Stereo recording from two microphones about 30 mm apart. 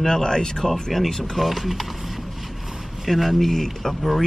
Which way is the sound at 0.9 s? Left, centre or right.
Centre.